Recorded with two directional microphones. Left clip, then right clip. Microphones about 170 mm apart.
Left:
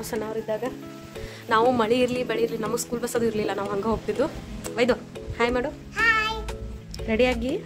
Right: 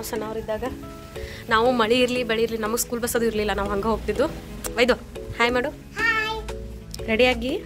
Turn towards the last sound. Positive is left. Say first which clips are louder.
# right 3 dB
turn(degrees=5)  # may be behind; listen again after turning